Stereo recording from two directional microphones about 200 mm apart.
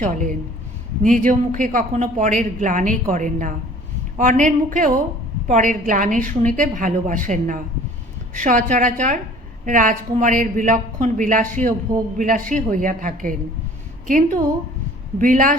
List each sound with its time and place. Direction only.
0.0 s a man's voice: 40° right (ahead or behind)